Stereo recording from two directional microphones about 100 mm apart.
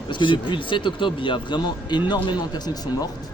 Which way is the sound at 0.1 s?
55° left (ahead or behind).